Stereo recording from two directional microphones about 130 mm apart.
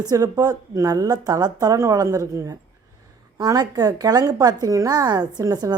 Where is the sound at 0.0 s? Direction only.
30° right (ahead or behind).